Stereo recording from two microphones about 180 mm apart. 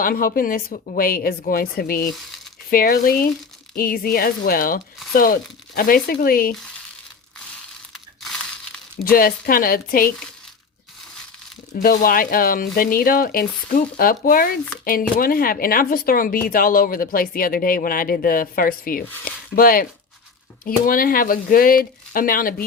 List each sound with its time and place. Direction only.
0.0 s speech: 50° left (ahead or behind)
7.9 s crumpling: centre (ahead or behind)
9.0 s speech: 50° left (ahead or behind)
11.7 s speech: 45° left (ahead or behind)